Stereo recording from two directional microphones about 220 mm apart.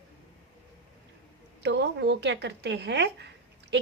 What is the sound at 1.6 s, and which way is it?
A woman's voice, 50° right (ahead or behind).